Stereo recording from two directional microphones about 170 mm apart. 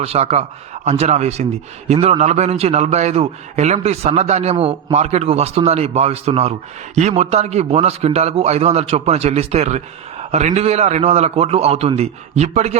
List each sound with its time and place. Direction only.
0.0 s a man's voice: 40° right (ahead or behind)